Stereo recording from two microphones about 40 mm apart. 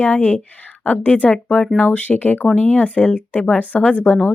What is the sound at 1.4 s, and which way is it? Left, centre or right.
Speech, left.